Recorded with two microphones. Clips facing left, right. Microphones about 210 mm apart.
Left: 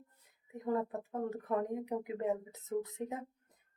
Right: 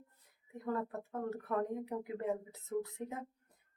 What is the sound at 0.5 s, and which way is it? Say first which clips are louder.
Speech: left 3 dB; 20° left (ahead or behind).